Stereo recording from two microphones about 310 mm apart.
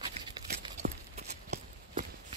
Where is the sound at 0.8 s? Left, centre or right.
Right.